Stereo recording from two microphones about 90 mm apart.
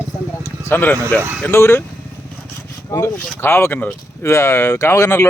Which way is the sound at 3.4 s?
25° left (ahead or behind).